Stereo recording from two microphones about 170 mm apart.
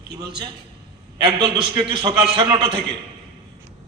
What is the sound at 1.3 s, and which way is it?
A man's voice, 25° right (ahead or behind).